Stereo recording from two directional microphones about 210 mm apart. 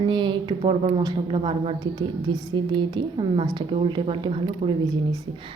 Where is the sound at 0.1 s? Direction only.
20° right (ahead or behind).